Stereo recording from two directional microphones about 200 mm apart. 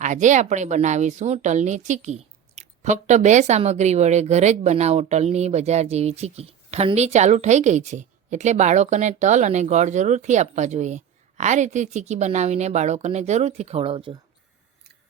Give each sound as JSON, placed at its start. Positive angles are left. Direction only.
{"t": 0.0, "sound": "speech", "side_deg": -40}